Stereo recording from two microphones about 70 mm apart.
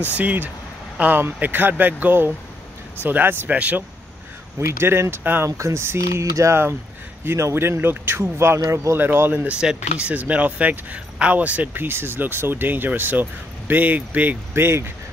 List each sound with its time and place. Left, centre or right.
0.1 s speech: right
4.6 s speech: right
5.6 s speech: right
8.5 s speech: right
8.9 s speech: right
9.3 s speech: centre
14.5 s speech: right